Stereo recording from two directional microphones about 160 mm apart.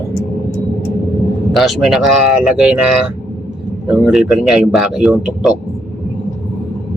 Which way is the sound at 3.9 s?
Centre (ahead or behind).